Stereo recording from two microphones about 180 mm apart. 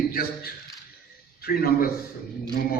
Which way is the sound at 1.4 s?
55° left (ahead or behind).